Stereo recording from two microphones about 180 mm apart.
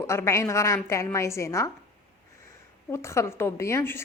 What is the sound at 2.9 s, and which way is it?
A woman's voice, 15° left (ahead or behind).